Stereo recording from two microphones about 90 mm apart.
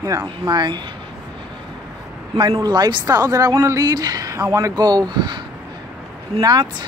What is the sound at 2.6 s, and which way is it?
A woman's voice, 50° right (ahead or behind).